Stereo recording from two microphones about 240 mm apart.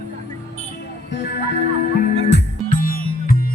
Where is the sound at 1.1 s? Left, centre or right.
Left.